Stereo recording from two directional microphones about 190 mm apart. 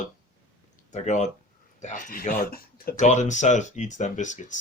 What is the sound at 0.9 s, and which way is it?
Speech, 40° left (ahead or behind).